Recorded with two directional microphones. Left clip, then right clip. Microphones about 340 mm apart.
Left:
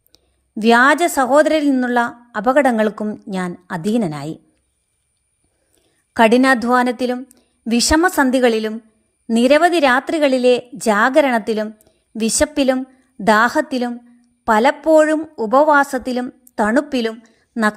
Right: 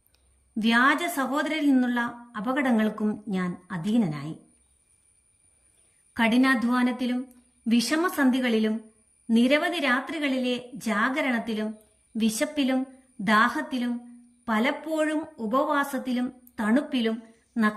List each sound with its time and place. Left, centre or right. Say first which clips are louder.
0.6 s a woman's voice: left 10 dB; centre
6.1 s a woman's voice: left 11 dB; centre